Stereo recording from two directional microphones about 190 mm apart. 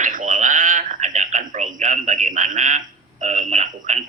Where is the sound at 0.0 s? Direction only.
40° right (ahead or behind).